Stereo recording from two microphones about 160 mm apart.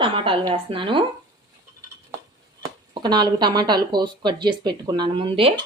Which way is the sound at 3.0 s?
25° right (ahead or behind).